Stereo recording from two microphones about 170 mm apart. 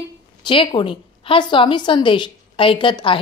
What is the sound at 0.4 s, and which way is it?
A woman's voice, 30° left (ahead or behind).